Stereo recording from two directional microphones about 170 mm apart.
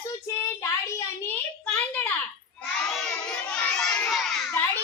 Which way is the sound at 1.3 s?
10° left (ahead or behind).